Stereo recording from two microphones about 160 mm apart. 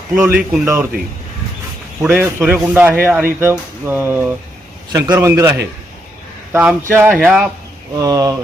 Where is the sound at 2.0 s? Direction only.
10° right (ahead or behind).